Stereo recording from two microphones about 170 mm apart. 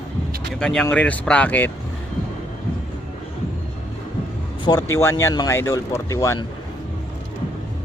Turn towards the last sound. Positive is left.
turn(degrees=20)  # may be behind; listen again after turning